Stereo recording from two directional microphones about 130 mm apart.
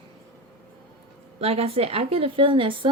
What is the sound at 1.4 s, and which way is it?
Speech, 50° right (ahead or behind).